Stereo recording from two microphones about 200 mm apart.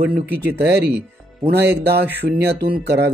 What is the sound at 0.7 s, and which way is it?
Speech, 55° right (ahead or behind).